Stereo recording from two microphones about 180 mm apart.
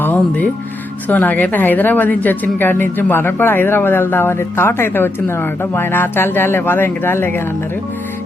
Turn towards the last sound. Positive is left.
turn(degrees=10)  # may be behind; listen again after turning